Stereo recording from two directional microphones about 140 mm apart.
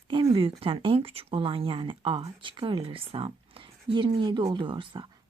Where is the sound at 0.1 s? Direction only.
40° right (ahead or behind).